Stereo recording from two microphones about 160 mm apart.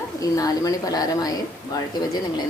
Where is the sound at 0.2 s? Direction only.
25° left (ahead or behind).